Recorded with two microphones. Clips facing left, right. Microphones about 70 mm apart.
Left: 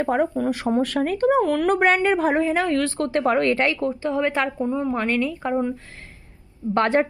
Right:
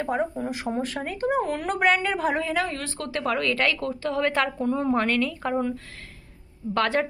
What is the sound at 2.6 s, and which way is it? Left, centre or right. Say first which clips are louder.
Speech: left 10 dB; left.